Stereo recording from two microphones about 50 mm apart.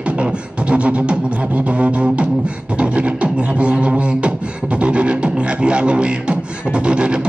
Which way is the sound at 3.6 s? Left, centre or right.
Right.